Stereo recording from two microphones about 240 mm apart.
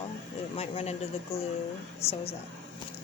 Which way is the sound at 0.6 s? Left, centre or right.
Left.